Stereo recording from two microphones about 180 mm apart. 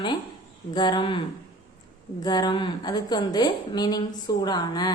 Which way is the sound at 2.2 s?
20° left (ahead or behind).